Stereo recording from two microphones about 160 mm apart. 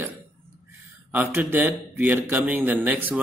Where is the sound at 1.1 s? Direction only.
10° right (ahead or behind).